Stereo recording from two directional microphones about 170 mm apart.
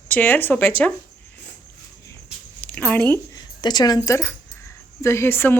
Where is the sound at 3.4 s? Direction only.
25° left (ahead or behind).